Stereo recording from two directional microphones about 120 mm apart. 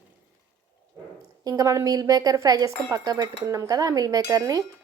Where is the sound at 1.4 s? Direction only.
30° right (ahead or behind).